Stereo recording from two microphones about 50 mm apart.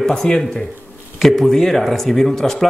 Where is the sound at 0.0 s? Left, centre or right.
Centre.